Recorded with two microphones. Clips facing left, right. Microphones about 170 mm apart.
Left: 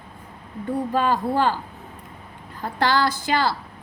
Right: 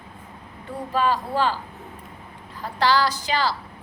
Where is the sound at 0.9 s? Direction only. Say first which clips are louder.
Even; 50° left (ahead or behind).